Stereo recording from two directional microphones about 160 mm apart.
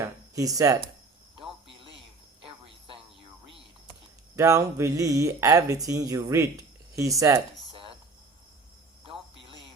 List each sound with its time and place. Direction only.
0.0 s a sound: 20° right (ahead or behind)
1.4 s cricket: 30° right (ahead or behind)
4.4 s speech: 20° right (ahead or behind)